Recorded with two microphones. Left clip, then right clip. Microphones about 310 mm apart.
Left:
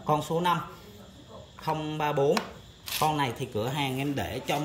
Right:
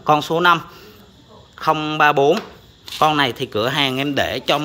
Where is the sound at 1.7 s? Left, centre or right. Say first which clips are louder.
Right 13 dB; centre.